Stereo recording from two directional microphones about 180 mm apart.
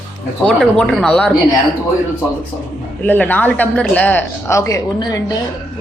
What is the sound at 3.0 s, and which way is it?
A man's voice, 10° left (ahead or behind).